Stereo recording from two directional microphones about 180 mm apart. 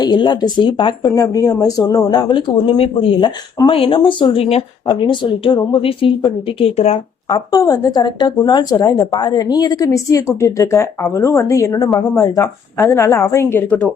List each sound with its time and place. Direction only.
0.0 s speech: 25° left (ahead or behind)